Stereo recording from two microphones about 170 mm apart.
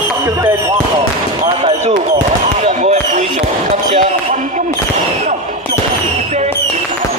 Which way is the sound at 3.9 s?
45° right (ahead or behind).